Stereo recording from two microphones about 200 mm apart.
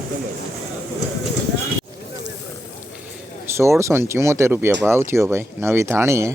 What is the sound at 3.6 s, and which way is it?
A man's voice, 15° right (ahead or behind).